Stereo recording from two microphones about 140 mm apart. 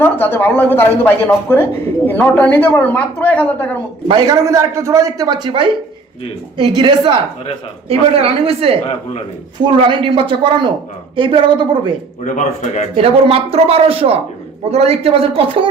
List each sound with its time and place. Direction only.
0.0 s speech: 15° left (ahead or behind)
4.4 s a man's voice: 20° right (ahead or behind)
12.2 s a man's voice: 60° left (ahead or behind)
13.0 s speech: 45° right (ahead or behind)